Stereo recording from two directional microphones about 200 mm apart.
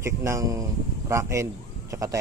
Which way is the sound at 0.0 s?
15° right (ahead or behind).